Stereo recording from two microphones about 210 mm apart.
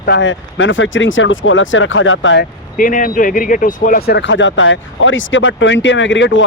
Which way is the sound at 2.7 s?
40° left (ahead or behind).